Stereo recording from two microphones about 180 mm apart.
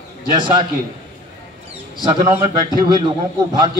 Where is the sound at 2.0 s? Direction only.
30° right (ahead or behind).